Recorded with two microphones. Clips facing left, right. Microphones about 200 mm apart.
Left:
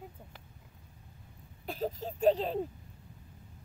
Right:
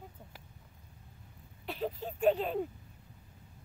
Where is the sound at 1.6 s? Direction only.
45° left (ahead or behind).